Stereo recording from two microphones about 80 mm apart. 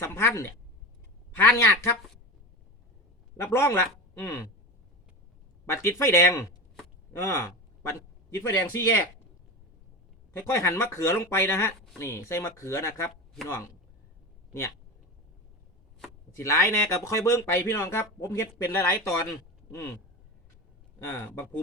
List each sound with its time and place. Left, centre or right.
0.0 s speech: left
1.5 s speech: left
3.3 s a man's voice: left
5.6 s a man's voice: left
10.3 s speech: left
16.3 s speech: left
21.0 s speech: left